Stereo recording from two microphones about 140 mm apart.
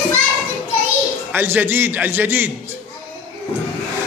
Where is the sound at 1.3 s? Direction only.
15° right (ahead or behind).